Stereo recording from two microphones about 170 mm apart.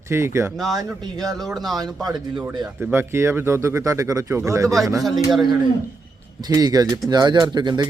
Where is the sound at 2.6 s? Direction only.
10° right (ahead or behind).